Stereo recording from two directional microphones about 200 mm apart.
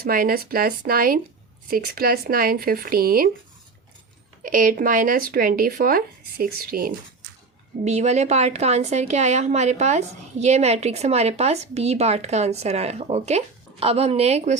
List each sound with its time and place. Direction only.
0.0 s speech: 45° right (ahead or behind)
4.4 s speech: 45° right (ahead or behind)
7.9 s a woman's voice: 35° right (ahead or behind)